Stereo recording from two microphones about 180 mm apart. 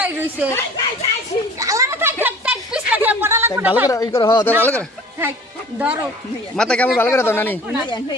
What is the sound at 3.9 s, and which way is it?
Speech, 20° left (ahead or behind).